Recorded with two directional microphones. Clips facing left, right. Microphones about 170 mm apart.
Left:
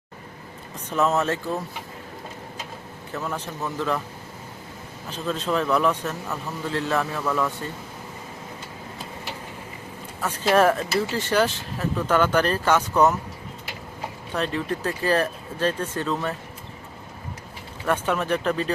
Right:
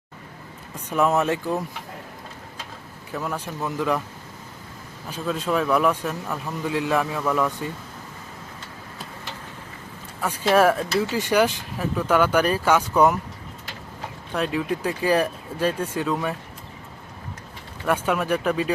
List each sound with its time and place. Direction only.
0.9 s speech: 10° right (ahead or behind)
3.1 s speech: 5° right (ahead or behind)
5.0 s speech: 10° right (ahead or behind)
10.2 s speech: 10° right (ahead or behind)
10.8 s speech: 5° left (ahead or behind)
11.1 s speech: 15° right (ahead or behind)
14.3 s speech: 10° right (ahead or behind)
17.8 s speech: 10° right (ahead or behind)